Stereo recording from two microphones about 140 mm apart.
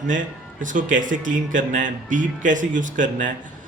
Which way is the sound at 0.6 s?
70° right (ahead or behind).